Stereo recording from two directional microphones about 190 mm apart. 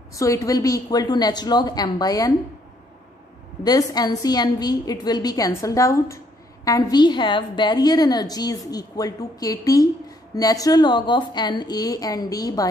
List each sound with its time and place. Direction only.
0.1 s a woman's voice: 15° left (ahead or behind)
3.6 s a woman's voice: 20° left (ahead or behind)